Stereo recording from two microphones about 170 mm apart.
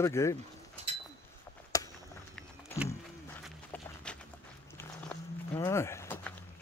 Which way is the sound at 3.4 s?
5° left (ahead or behind).